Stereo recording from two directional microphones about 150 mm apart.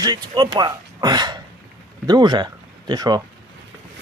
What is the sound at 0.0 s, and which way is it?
Speech, 25° right (ahead or behind).